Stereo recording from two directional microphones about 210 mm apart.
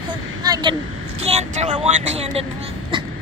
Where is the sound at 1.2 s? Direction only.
30° right (ahead or behind).